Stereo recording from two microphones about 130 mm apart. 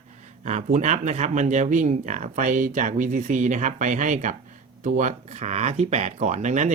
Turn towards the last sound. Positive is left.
turn(degrees=-65)  # may be behind; listen again after turning